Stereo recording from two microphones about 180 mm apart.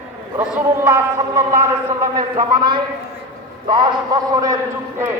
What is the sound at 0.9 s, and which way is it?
A man's voice, 15° right (ahead or behind).